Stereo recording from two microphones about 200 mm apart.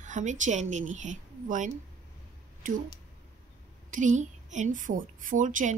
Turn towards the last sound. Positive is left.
turn(degrees=-40)  # may be behind; listen again after turning